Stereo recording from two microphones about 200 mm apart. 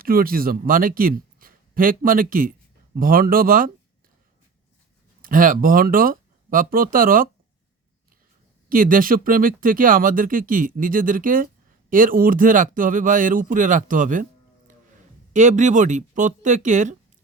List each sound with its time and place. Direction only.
0.0 s a man's voice: 45° right (ahead or behind)
5.2 s speech: 45° right (ahead or behind)
8.7 s speech: 45° right (ahead or behind)
15.3 s speech: 35° right (ahead or behind)